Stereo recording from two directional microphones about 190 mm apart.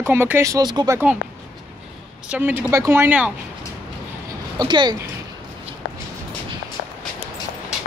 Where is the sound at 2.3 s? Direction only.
10° right (ahead or behind).